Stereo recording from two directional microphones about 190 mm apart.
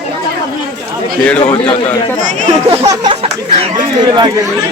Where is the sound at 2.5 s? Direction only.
30° right (ahead or behind).